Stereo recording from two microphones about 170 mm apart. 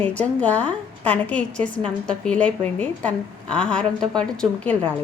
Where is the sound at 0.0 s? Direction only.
10° left (ahead or behind).